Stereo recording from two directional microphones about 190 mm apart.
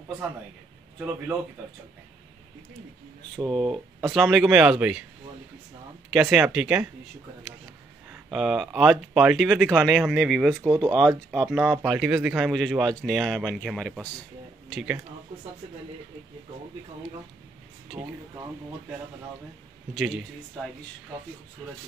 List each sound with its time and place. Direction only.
3.7 s speech: centre (ahead or behind)
6.1 s speech: 5° right (ahead or behind)
8.1 s speech: centre (ahead or behind)
10.6 s speech: 20° right (ahead or behind)
10.9 s speech: centre (ahead or behind)
17.9 s speech: 20° right (ahead or behind)
19.9 s speech: centre (ahead or behind)